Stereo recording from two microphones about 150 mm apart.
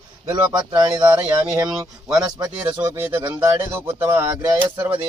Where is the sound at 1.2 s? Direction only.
15° right (ahead or behind).